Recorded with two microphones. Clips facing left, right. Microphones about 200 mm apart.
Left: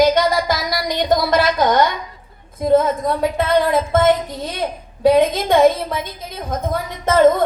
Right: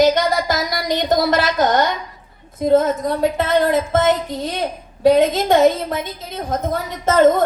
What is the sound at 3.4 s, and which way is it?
Speech, 45° right (ahead or behind).